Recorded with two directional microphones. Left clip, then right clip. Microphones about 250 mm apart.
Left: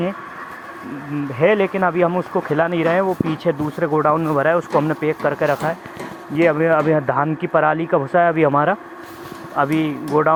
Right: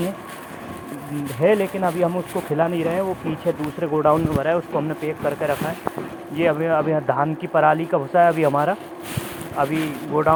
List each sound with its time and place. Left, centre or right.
1.4 s speech: left